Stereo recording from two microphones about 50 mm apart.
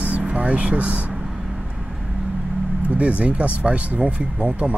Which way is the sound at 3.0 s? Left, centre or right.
Right.